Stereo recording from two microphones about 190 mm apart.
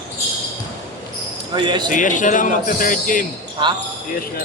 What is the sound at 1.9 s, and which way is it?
Speech, 40° left (ahead or behind).